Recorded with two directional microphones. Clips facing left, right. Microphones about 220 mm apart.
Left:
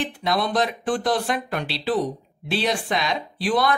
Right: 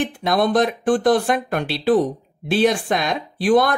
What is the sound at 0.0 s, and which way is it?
Speech, 50° right (ahead or behind).